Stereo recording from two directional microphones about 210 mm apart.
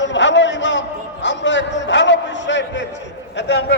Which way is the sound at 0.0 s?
60° left (ahead or behind).